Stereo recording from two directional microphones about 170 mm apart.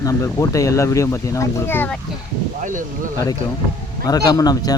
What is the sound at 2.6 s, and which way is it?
Speech, 50° right (ahead or behind).